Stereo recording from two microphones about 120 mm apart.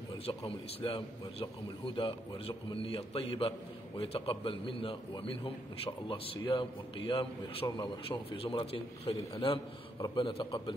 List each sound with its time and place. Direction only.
0.3 s a man's voice: 45° left (ahead or behind)
8.4 s a man's voice: 50° left (ahead or behind)